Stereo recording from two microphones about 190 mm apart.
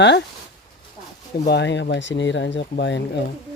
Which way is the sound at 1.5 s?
65° left (ahead or behind).